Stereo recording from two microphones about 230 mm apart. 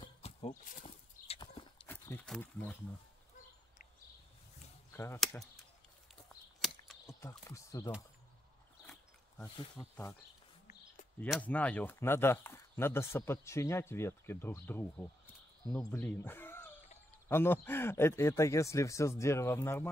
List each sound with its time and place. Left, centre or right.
0.0 s horse: left
1.9 s speech: centre
4.9 s speech: centre
7.1 s speech: centre
9.4 s speech: centre
11.1 s speech: centre